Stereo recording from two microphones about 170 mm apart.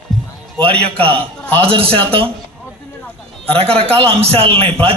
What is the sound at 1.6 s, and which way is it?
Speech, 35° right (ahead or behind).